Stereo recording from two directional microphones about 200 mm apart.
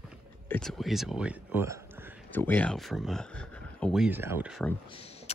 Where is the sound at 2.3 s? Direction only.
10° left (ahead or behind).